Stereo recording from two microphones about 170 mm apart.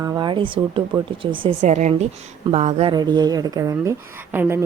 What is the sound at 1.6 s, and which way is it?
A woman's voice, 45° right (ahead or behind).